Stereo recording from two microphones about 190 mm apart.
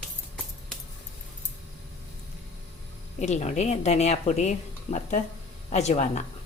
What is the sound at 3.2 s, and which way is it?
Speech, 35° left (ahead or behind).